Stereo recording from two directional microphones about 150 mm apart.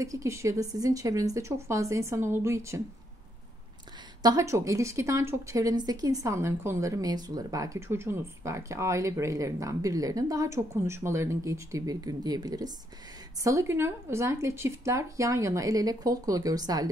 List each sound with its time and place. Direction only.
0.0 s a woman's voice: 20° right (ahead or behind)
4.2 s a woman's voice: 20° right (ahead or behind)